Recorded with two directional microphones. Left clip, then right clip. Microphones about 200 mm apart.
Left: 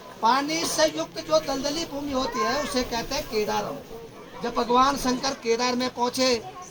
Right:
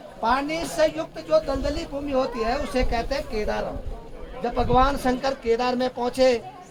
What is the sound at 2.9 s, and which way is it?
Speech, centre (ahead or behind).